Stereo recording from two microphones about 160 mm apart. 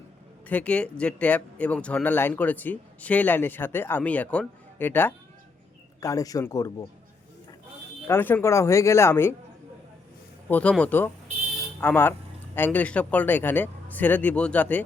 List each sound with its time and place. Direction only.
0.4 s speech: 10° left (ahead or behind)
8.0 s speech: 15° left (ahead or behind)
10.5 s speech: 10° left (ahead or behind)